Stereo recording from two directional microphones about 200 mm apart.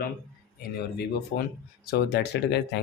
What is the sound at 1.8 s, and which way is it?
Speech, 55° left (ahead or behind).